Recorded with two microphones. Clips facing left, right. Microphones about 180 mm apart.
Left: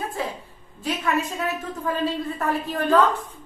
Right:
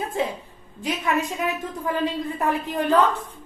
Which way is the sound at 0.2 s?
20° right (ahead or behind).